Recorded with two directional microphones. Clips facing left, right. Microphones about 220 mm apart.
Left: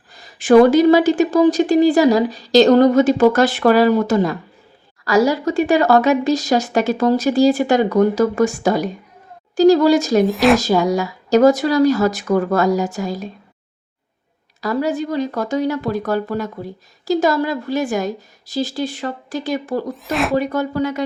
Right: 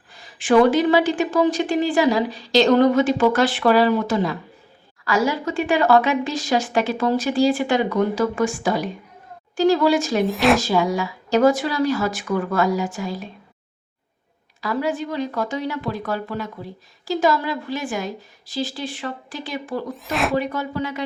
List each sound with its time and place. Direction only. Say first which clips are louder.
0.1 s a woman's voice: left 6 dB; 40° left (ahead or behind)
10.2 s speech: left 4 dB; centre (ahead or behind)
10.6 s a woman's voice: left 4 dB; 40° left (ahead or behind)
14.6 s a woman's voice: left 4 dB; 40° left (ahead or behind)
19.9 s speech: left 3 dB; centre (ahead or behind)
20.3 s a woman's voice: left 5 dB; 40° left (ahead or behind)